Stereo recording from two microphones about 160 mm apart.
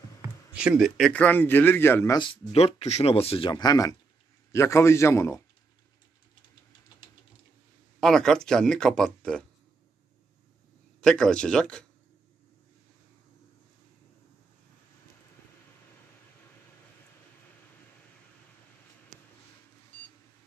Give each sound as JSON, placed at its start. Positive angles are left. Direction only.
{"t": 0.2, "sound": "speech", "side_deg": -10}
{"t": 2.1, "sound": "a man's voice", "side_deg": 35}
{"t": 8.0, "sound": "speech", "side_deg": 5}
{"t": 11.0, "sound": "speech", "side_deg": 5}